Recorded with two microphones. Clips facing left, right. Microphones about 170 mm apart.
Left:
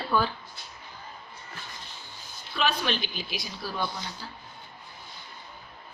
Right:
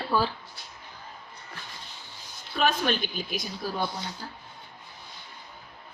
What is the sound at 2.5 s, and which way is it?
A woman's voice, 45° right (ahead or behind).